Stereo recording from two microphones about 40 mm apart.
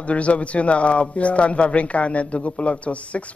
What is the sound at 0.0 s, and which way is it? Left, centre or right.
A man's voice, left.